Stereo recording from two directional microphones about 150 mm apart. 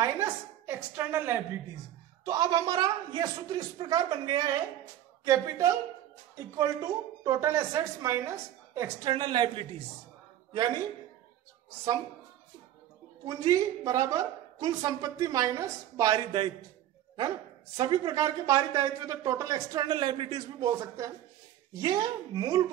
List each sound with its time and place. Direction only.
0.0 s a sound: 15° right (ahead or behind)
2.2 s a woman's voice: 25° right (ahead or behind)
9.1 s speech: 30° right (ahead or behind)
13.2 s a woman's voice: 25° right (ahead or behind)
17.7 s a woman's voice: 30° right (ahead or behind)
20.7 s a woman's voice: 20° right (ahead or behind)